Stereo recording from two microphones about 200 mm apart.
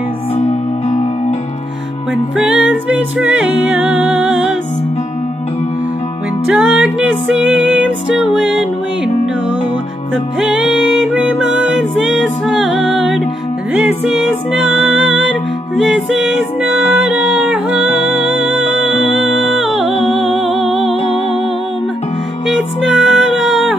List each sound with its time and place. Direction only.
2.3 s music: 5° right (ahead or behind)
6.5 s music: 5° right (ahead or behind)
10.5 s music: centre (ahead or behind)
19.9 s music: 30° left (ahead or behind)
20.4 s music: centre (ahead or behind)
22.5 s music: centre (ahead or behind)